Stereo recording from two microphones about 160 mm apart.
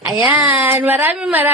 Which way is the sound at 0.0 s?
5° right (ahead or behind).